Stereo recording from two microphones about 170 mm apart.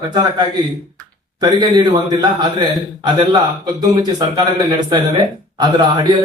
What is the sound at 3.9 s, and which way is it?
Speech, 20° right (ahead or behind).